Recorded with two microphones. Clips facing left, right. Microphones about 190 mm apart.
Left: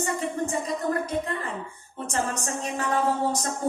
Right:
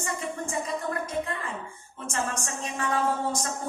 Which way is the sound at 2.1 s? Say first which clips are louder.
Left 3 dB; 35° left (ahead or behind).